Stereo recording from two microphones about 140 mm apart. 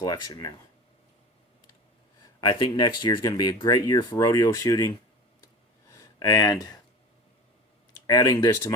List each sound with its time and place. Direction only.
0.0 s speech: 25° left (ahead or behind)
2.4 s speech: 35° left (ahead or behind)
5.9 s a sound: 25° left (ahead or behind)
8.0 s speech: 25° left (ahead or behind)